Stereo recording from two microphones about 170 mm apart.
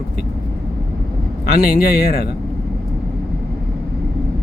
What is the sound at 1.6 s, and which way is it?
Speech, 60° left (ahead or behind).